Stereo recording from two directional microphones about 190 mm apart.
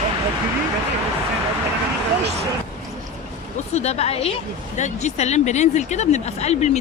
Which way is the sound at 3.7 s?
35° left (ahead or behind).